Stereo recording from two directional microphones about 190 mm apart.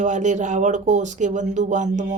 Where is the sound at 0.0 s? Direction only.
40° right (ahead or behind).